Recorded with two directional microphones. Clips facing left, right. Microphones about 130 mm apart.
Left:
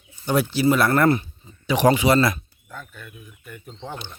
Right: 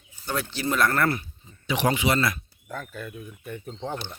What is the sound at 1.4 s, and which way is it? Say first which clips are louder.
Speech: left 6 dB; 40° left (ahead or behind).